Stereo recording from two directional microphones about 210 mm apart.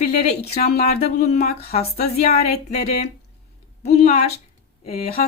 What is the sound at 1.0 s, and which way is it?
Speech, 35° left (ahead or behind).